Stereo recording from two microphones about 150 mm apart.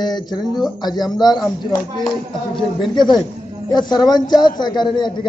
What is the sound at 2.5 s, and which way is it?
A man's voice, 30° left (ahead or behind).